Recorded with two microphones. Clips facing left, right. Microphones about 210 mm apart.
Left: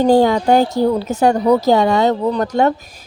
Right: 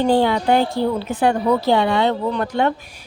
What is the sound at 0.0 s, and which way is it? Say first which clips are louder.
A woman's voice: left 4 dB; 40° left (ahead or behind).